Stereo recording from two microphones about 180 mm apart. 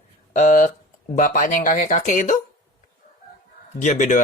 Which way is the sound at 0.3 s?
45° left (ahead or behind).